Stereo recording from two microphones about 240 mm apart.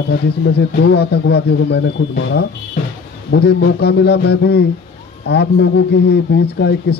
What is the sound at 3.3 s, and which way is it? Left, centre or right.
Speech, left.